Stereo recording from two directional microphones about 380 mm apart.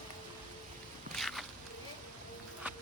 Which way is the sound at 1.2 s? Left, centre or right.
Centre.